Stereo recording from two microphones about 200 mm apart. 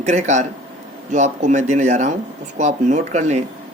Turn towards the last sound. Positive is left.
turn(degrees=-35)  # may be behind; listen again after turning